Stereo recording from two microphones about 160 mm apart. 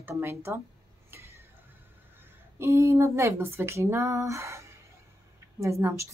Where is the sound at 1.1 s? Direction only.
15° right (ahead or behind).